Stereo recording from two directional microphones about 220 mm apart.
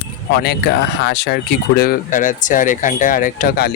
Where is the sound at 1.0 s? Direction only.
50° left (ahead or behind).